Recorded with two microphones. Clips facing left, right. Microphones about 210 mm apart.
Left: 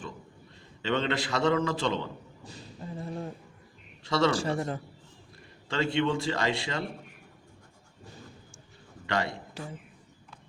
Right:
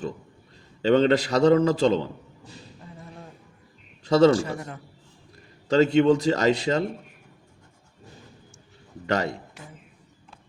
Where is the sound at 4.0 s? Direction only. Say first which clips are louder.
Right 9 dB; 40° right (ahead or behind).